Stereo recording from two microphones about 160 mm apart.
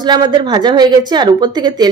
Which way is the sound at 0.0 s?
25° right (ahead or behind).